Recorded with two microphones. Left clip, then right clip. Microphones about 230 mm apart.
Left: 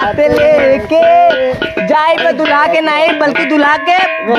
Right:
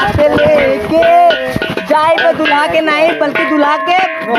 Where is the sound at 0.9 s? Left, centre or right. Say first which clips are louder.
Even; left.